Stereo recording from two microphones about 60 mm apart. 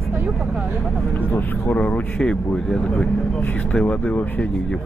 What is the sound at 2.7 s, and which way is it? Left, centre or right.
Speech, centre.